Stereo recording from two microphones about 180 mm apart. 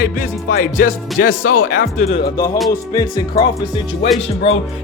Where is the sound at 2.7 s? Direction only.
20° left (ahead or behind).